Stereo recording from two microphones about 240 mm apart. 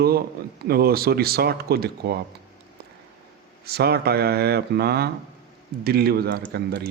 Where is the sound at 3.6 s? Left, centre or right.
Right.